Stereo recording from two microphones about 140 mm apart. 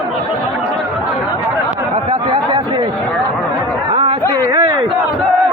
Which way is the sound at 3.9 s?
40° right (ahead or behind).